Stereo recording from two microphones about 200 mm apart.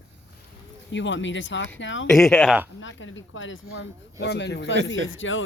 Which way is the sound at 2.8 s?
75° left (ahead or behind).